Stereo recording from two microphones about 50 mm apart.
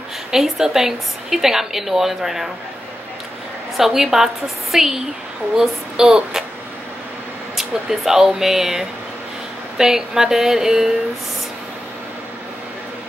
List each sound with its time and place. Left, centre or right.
0.3 s a woman's voice: centre
3.7 s speech: centre
7.5 s speech: centre